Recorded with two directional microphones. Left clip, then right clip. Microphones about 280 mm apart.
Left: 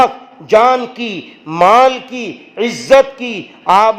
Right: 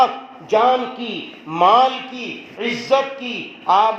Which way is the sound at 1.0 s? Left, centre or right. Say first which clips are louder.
Left 5 dB; left.